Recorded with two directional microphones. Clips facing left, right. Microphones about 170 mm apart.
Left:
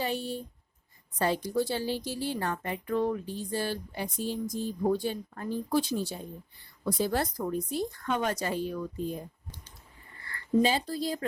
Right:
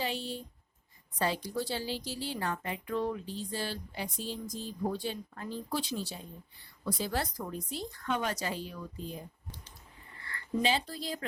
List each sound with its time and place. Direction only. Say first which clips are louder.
0.0 s a woman's voice: left 4 dB; 50° left (ahead or behind)
10.6 s speech: left 4 dB; 40° left (ahead or behind)